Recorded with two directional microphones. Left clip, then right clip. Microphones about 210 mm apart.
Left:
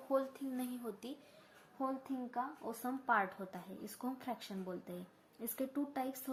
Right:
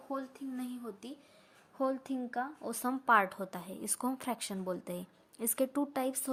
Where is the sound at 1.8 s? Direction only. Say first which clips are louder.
Right 6 dB; 45° right (ahead or behind).